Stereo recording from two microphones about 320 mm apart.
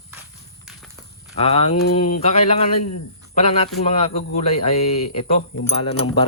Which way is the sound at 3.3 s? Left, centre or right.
Centre.